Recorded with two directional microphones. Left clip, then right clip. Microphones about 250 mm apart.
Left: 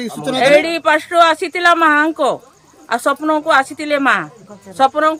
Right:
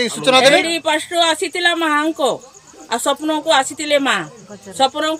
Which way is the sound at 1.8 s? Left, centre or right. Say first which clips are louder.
Left 4 dB; left.